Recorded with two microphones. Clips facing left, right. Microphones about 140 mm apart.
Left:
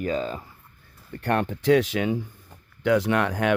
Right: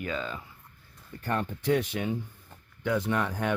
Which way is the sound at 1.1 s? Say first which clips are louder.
Left 6 dB; 75° left (ahead or behind).